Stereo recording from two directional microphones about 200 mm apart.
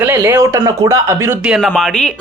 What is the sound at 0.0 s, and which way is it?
Speech, 10° right (ahead or behind).